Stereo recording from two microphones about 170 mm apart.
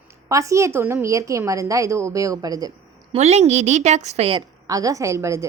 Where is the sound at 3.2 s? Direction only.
40° right (ahead or behind).